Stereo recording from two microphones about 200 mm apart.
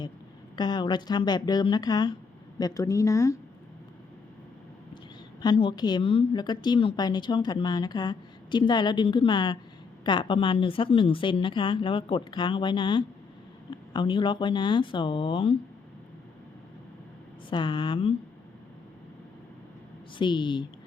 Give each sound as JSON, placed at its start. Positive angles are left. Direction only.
{"t": 0.5, "sound": "speech", "side_deg": 20}
{"t": 5.4, "sound": "speech", "side_deg": 25}
{"t": 17.5, "sound": "speech", "side_deg": 25}
{"t": 20.1, "sound": "speech", "side_deg": 25}